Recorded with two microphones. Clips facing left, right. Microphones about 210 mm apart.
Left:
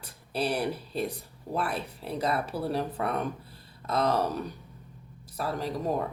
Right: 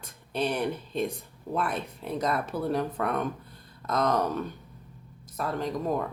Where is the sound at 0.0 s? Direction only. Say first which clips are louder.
Right 1 dB; 35° left (ahead or behind).